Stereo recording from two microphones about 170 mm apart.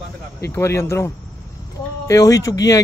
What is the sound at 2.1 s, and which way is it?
Speech, 20° left (ahead or behind).